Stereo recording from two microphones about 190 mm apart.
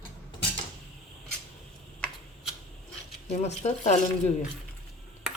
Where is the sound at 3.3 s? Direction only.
35° left (ahead or behind).